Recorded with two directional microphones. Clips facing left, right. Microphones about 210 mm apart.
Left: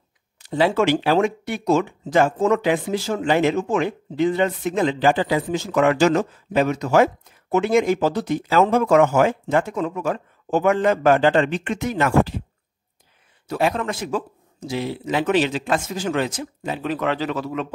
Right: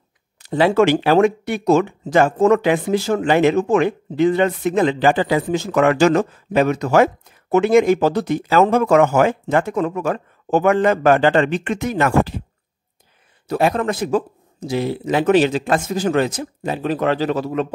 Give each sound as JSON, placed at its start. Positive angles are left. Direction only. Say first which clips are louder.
{"t": 0.4, "sound": "speech", "louder": "right 4 dB", "side_deg": -60}
{"t": 13.5, "sound": "speech", "louder": "right 4 dB", "side_deg": -45}